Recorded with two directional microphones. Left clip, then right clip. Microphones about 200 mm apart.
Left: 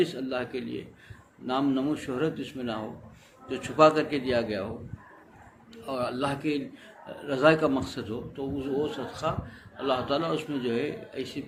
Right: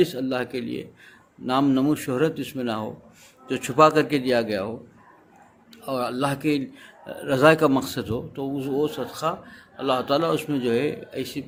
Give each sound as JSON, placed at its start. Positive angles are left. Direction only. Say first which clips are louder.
{"t": 0.0, "sound": "speech", "louder": "right 5 dB", "side_deg": -50}
{"t": 5.7, "sound": "speech", "louder": "right 4 dB", "side_deg": -50}